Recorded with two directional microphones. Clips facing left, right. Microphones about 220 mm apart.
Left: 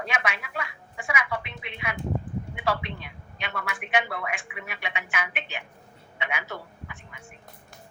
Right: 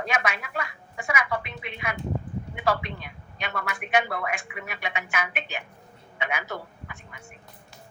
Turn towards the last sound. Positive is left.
turn(degrees=-45)  # may be behind; listen again after turning